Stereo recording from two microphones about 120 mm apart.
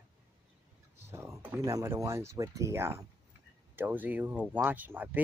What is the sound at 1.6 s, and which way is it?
Speech, 25° right (ahead or behind).